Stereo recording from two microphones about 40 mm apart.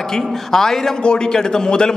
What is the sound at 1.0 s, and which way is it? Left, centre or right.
Speech, left.